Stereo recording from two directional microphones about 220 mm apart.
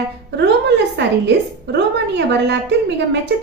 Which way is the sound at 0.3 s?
50° right (ahead or behind).